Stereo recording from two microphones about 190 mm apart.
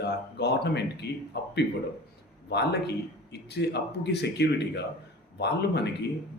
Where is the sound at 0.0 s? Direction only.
60° left (ahead or behind).